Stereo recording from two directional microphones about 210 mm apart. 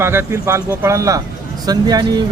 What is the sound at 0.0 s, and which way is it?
Speech, 10° right (ahead or behind).